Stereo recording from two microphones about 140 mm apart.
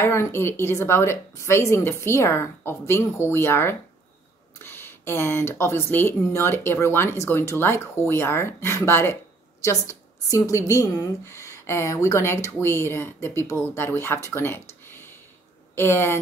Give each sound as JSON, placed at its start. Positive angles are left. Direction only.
{"t": 0.0, "sound": "speech", "side_deg": 20}